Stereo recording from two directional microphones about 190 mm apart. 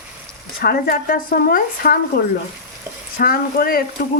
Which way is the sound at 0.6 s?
50° left (ahead or behind).